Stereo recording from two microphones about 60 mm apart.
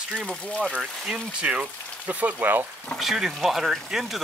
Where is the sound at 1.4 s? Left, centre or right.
Right.